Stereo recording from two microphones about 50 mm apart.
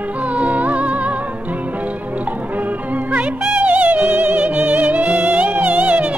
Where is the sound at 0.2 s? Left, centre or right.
Right.